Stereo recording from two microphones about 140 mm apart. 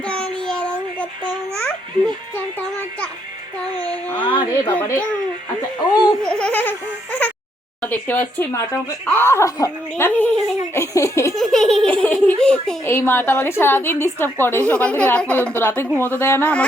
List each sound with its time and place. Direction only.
0.0 s child singing: 5° left (ahead or behind)
2.3 s music: 15° left (ahead or behind)
4.2 s speech: 35° left (ahead or behind)
4.6 s a woman's voice: 15° left (ahead or behind)
5.9 s laughter: 30° left (ahead or behind)
6.2 s baby laughter: 5° left (ahead or behind)
7.8 s a woman's voice: 15° left (ahead or behind)
9.9 s a woman's voice: 10° left (ahead or behind)
11.3 s laughter: 5° left (ahead or behind)
12.8 s a woman's voice: 15° left (ahead or behind)